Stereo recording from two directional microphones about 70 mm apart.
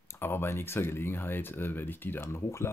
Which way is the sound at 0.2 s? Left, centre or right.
Left.